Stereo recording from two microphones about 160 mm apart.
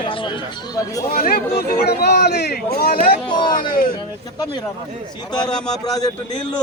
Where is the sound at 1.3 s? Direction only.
70° left (ahead or behind).